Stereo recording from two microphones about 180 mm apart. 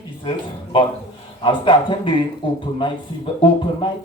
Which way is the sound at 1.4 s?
25° left (ahead or behind).